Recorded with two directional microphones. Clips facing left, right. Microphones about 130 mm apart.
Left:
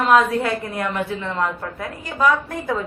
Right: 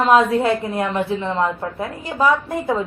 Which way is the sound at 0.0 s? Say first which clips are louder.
Right 2 dB; 25° right (ahead or behind).